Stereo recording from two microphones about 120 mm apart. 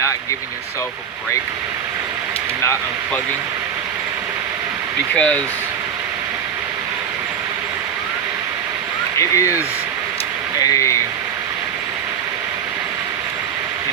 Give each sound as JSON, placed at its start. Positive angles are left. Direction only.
{"t": 5.1, "sound": "speech", "side_deg": 10}
{"t": 9.1, "sound": "speech", "side_deg": 25}
{"t": 10.6, "sound": "speech", "side_deg": 25}